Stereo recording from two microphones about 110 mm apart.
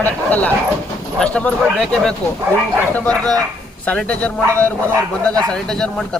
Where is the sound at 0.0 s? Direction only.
15° left (ahead or behind).